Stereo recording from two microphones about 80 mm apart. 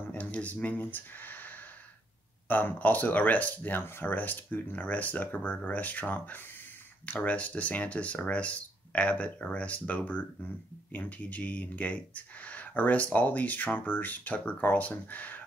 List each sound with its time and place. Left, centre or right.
0.1 s speech: centre